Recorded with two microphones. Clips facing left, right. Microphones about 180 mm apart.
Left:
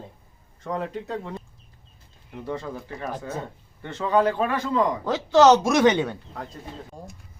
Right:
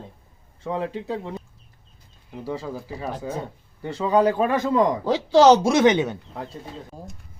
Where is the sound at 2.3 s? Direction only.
5° right (ahead or behind).